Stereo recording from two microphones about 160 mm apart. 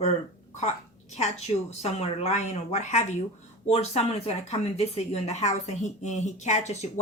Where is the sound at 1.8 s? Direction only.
40° left (ahead or behind).